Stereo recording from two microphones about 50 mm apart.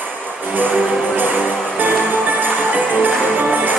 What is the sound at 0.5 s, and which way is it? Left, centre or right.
Music, right.